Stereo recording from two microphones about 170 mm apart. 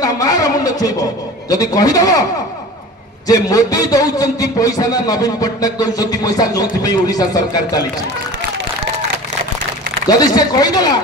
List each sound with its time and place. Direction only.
0.0 s a sound: 20° left (ahead or behind)
1.5 s a man's voice: 20° left (ahead or behind)
3.3 s a man's voice: 20° left (ahead or behind)
10.0 s a man's voice: 25° left (ahead or behind)